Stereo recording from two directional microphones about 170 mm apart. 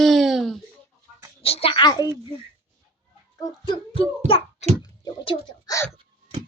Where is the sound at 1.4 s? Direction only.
35° left (ahead or behind).